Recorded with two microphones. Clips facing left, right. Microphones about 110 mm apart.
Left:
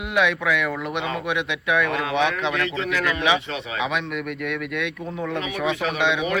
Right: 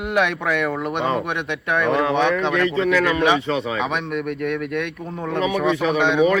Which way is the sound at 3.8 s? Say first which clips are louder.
Right 2 dB; 45° right (ahead or behind).